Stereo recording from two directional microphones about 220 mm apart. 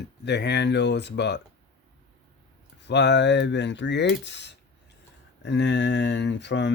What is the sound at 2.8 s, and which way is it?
Speech, 50° left (ahead or behind).